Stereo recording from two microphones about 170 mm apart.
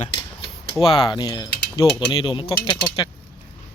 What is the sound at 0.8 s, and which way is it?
Speech, 30° left (ahead or behind).